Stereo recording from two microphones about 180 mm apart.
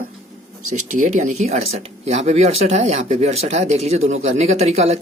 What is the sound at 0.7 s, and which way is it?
Speech, 40° right (ahead or behind).